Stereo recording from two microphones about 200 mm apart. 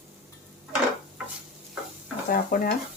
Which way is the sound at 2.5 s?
40° left (ahead or behind).